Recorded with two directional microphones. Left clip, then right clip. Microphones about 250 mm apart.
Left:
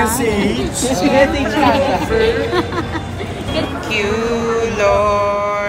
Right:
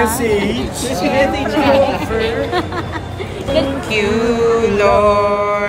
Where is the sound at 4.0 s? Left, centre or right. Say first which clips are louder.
Right 4 dB; centre.